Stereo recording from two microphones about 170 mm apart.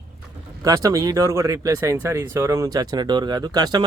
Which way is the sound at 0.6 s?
20° right (ahead or behind).